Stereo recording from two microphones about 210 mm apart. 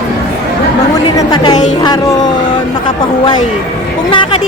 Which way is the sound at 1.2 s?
20° left (ahead or behind).